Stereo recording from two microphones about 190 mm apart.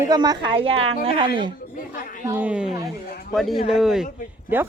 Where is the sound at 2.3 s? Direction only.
10° right (ahead or behind).